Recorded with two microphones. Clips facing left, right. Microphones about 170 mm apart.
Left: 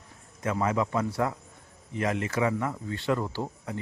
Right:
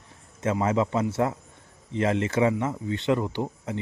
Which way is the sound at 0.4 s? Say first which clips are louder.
Right 3 dB; 25° right (ahead or behind).